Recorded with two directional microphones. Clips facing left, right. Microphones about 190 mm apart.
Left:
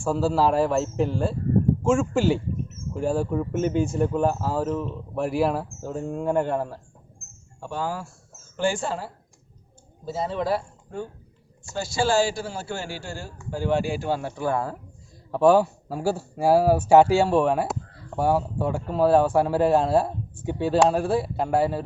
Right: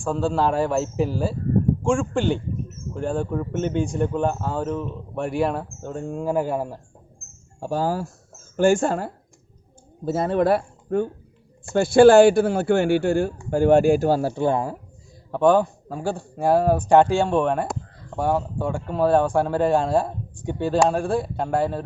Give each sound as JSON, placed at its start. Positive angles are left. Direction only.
{"t": 0.0, "sound": "speech", "side_deg": 5}
{"t": 7.6, "sound": "speech", "side_deg": -40}
{"t": 15.3, "sound": "speech", "side_deg": 5}